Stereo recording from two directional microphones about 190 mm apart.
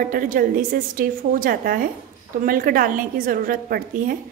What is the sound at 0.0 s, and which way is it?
A woman's voice, 45° right (ahead or behind).